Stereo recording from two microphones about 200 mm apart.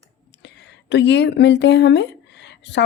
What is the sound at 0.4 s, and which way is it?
Speech, 60° left (ahead or behind).